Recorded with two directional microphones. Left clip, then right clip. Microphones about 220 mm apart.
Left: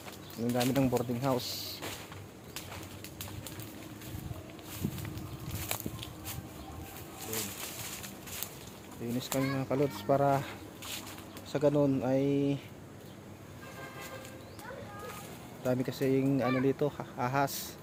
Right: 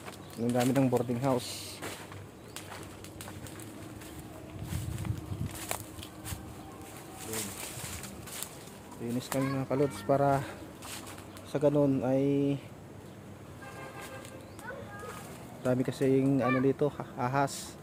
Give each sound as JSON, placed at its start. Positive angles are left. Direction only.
{"t": 0.5, "sound": "speech", "side_deg": -10}
{"t": 5.5, "sound": "a sound", "side_deg": -15}
{"t": 9.1, "sound": "speech", "side_deg": 5}
{"t": 11.5, "sound": "speech", "side_deg": 0}
{"t": 15.6, "sound": "speech", "side_deg": -10}